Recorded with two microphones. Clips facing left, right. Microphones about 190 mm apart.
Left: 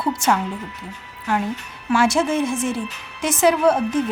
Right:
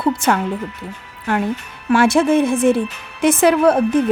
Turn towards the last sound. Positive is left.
turn(degrees=-60)  # may be behind; listen again after turning